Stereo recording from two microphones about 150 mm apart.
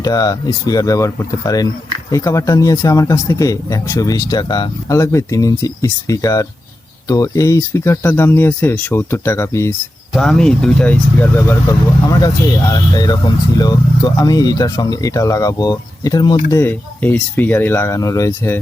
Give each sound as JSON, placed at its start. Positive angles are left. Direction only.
{"t": 0.0, "sound": "speech", "side_deg": 25}
{"t": 10.1, "sound": "speech", "side_deg": 5}
{"t": 12.0, "sound": "speech", "side_deg": 25}
{"t": 16.5, "sound": "speech", "side_deg": 15}